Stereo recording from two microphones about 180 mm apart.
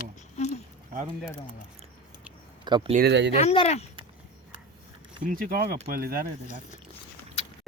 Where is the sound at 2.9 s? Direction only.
70° right (ahead or behind).